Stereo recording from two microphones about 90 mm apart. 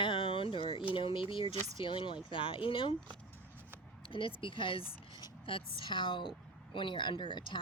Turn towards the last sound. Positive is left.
turn(degrees=65)  # may be behind; listen again after turning